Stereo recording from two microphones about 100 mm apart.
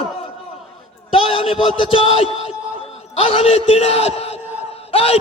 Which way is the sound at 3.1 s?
75° left (ahead or behind).